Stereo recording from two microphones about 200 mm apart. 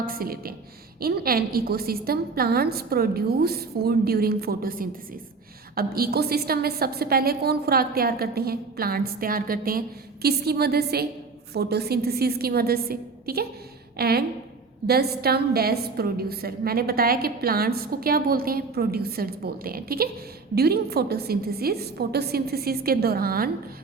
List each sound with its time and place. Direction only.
0.0 s a woman's voice: 45° right (ahead or behind)